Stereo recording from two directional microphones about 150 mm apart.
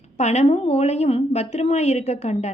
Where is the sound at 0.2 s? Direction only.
50° left (ahead or behind).